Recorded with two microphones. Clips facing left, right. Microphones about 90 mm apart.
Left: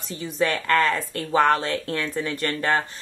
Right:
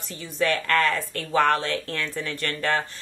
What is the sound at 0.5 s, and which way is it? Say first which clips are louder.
Speech: left 1 dB; centre (ahead or behind).